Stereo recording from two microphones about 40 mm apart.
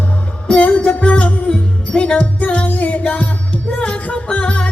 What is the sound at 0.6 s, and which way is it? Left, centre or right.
Music, left.